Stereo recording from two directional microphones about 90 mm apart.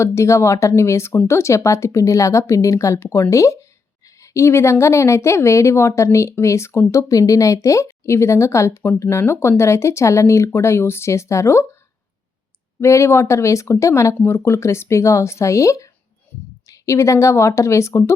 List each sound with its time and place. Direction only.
0.0 s a woman's voice: 30° left (ahead or behind)
12.8 s a woman's voice: 30° left (ahead or behind)